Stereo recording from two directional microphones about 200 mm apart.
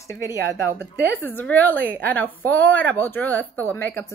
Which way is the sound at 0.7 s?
10° left (ahead or behind).